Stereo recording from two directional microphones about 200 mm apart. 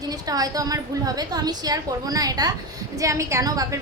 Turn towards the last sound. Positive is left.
turn(degrees=-20)  # may be behind; listen again after turning